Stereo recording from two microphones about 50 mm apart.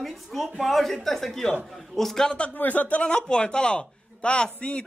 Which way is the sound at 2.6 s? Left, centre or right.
Left.